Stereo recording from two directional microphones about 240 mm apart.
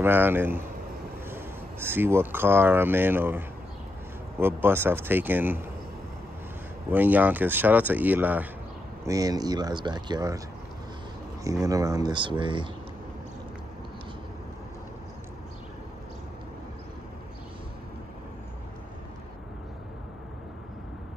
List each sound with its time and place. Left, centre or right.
0.0 s speech: centre
6.9 s speech: centre
11.4 s speech: centre